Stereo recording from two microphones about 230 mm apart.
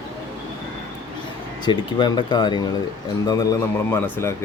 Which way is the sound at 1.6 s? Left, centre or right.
Centre.